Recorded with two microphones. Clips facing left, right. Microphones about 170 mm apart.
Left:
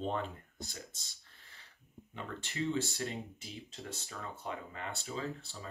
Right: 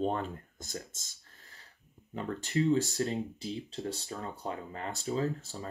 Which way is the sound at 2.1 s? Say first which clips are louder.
Right 10 dB; 40° right (ahead or behind).